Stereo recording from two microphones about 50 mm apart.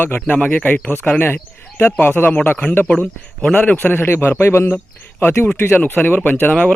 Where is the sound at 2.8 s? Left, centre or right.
Left.